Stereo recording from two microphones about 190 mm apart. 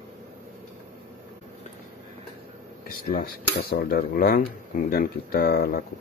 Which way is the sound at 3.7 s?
55° left (ahead or behind).